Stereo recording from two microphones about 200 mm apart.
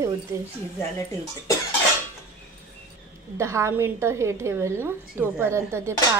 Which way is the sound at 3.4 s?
15° right (ahead or behind).